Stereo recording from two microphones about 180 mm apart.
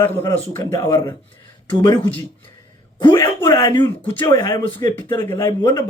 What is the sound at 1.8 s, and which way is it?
Speech, 25° left (ahead or behind).